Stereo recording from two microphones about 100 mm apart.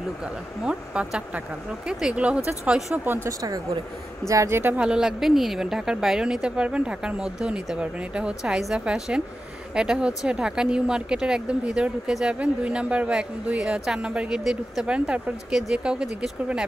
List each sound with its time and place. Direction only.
0.2 s speech: 10° right (ahead or behind)
3.3 s a woman's voice: 35° right (ahead or behind)
4.7 s speech: 10° right (ahead or behind)